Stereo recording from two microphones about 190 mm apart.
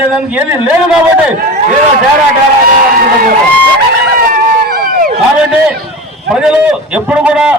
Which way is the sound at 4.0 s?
55° right (ahead or behind).